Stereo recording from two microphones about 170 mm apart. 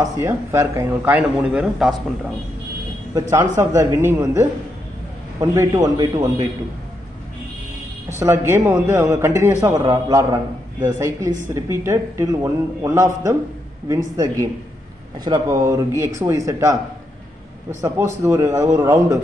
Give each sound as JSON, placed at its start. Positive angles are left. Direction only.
{"t": 0.0, "sound": "a man's voice", "side_deg": -15}
{"t": 3.2, "sound": "a man's voice", "side_deg": -15}
{"t": 8.1, "sound": "a man's voice", "side_deg": -15}
{"t": 17.8, "sound": "a man's voice", "side_deg": -20}